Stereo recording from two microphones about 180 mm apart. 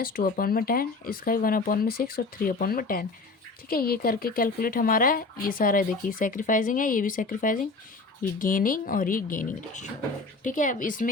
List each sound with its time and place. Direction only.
0.0 s speech: 55° left (ahead or behind)